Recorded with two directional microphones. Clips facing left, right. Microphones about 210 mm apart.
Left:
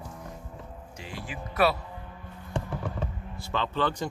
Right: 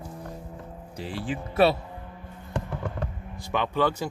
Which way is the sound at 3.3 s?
15° right (ahead or behind).